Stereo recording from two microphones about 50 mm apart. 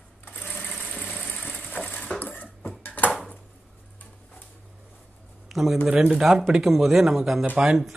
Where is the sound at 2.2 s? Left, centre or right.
Left.